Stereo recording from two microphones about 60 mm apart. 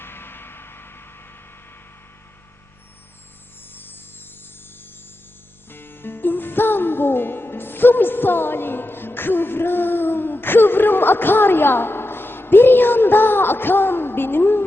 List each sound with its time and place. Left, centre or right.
0.0 s vehicle: left
5.7 s music: left